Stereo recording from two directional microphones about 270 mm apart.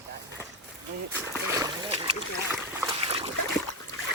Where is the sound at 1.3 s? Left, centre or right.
Centre.